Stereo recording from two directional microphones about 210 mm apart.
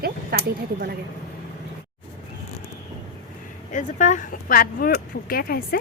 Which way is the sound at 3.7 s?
35° left (ahead or behind).